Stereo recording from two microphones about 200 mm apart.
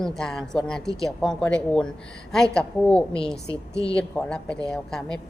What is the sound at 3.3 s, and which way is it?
Speech, 15° right (ahead or behind).